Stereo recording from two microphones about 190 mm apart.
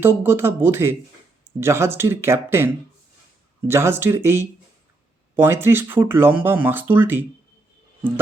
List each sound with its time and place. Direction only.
0.0 s speech: 10° right (ahead or behind)
3.7 s speech: 15° right (ahead or behind)